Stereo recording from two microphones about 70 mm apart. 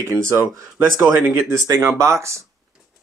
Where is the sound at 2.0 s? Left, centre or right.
Right.